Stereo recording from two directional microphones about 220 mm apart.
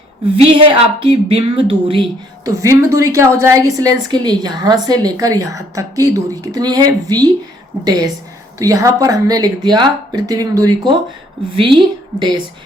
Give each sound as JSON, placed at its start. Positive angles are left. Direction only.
{"t": 0.4, "sound": "speech", "side_deg": -25}
{"t": 8.5, "sound": "a woman's voice", "side_deg": -15}